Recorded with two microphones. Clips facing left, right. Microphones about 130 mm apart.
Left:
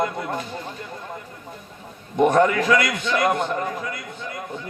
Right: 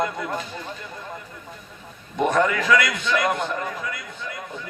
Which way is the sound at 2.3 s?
40° left (ahead or behind).